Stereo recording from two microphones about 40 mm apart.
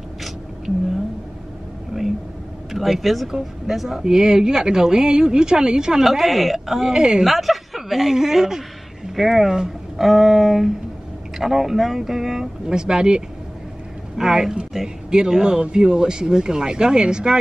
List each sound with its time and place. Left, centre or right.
2.7 s speech: centre
6.0 s speech: centre
6.9 s speech: centre
7.2 s speech: centre; by 17.4 s right